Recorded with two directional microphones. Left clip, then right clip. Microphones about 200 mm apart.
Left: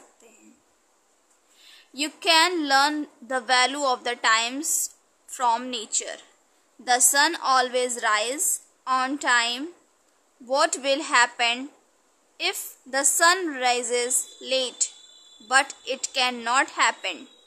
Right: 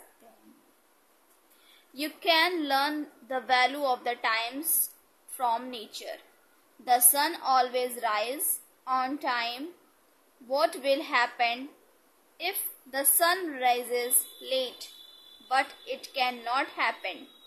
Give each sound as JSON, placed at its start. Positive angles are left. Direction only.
{"t": 2.0, "sound": "a woman's voice", "side_deg": 20}